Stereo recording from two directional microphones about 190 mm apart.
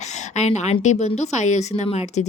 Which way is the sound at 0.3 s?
35° left (ahead or behind).